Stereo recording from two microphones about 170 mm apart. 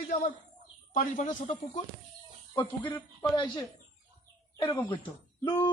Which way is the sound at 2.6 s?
25° left (ahead or behind).